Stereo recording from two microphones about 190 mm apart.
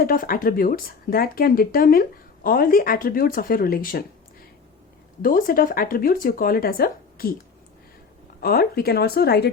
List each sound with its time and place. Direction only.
0.0 s speech: 50° left (ahead or behind)
5.2 s speech: 45° left (ahead or behind)
8.4 s speech: 50° left (ahead or behind)